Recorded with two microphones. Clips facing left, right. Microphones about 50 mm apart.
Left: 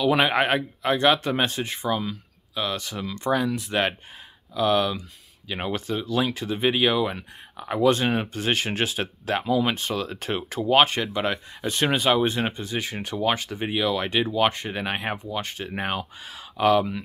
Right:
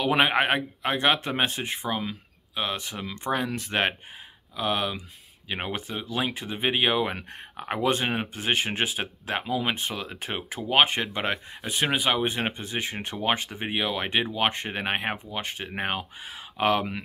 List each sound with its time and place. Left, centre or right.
0.1 s speech: right
3.5 s speech: right
4.6 s speech: centre
7.1 s speech: right
7.9 s speech: centre
11.0 s speech: right
11.6 s speech: centre
12.4 s speech: right